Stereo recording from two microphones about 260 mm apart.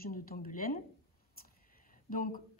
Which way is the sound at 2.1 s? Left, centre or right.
Left.